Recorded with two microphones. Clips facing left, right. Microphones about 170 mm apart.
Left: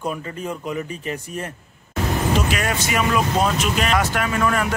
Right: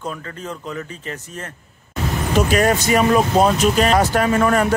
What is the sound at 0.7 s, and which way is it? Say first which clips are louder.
Speech: left 3 dB; 15° left (ahead or behind).